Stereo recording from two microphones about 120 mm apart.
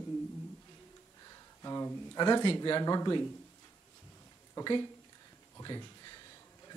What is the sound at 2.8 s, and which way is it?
Speech, 35° left (ahead or behind).